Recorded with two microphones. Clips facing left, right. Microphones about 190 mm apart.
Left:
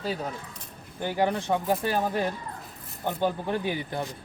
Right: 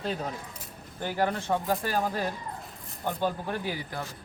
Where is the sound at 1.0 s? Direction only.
15° left (ahead or behind).